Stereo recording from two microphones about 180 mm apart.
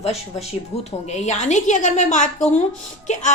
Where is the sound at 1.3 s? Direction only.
40° left (ahead or behind).